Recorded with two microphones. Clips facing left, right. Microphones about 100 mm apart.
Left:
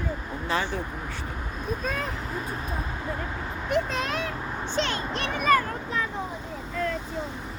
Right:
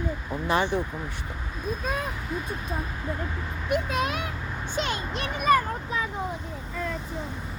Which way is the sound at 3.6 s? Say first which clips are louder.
Even; 10° right (ahead or behind).